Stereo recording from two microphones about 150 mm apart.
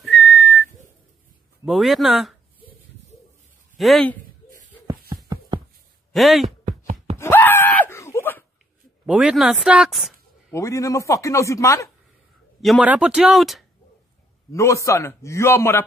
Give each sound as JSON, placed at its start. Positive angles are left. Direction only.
{"t": 0.0, "sound": "whistling", "side_deg": 0}
{"t": 1.7, "sound": "speech", "side_deg": 0}
{"t": 3.7, "sound": "speech", "side_deg": 0}
{"t": 5.1, "sound": "a sound", "side_deg": -30}
{"t": 6.1, "sound": "speech", "side_deg": 0}
{"t": 7.2, "sound": "wail", "side_deg": 15}
{"t": 9.0, "sound": "speech", "side_deg": -5}
{"t": 10.5, "sound": "speech", "side_deg": 20}
{"t": 12.8, "sound": "speech", "side_deg": -5}
{"t": 14.5, "sound": "speech", "side_deg": 20}